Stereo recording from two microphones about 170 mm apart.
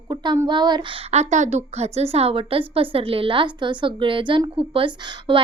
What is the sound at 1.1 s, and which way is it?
A woman's voice, 40° right (ahead or behind).